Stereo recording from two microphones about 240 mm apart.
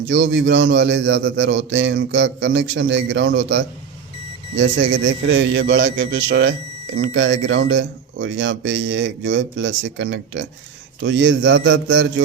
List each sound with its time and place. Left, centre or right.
0.1 s a man's voice: right